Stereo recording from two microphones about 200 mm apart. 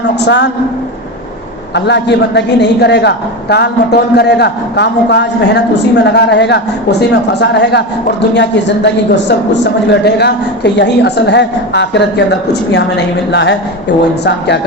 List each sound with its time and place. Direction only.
1.7 s a man's voice: 60° left (ahead or behind)